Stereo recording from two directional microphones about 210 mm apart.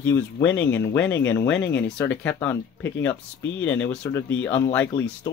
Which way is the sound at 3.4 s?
65° left (ahead or behind).